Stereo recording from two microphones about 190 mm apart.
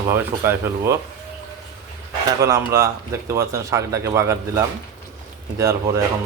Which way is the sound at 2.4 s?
15° right (ahead or behind).